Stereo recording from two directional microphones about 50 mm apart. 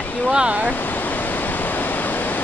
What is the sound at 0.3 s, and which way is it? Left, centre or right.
Speech, centre.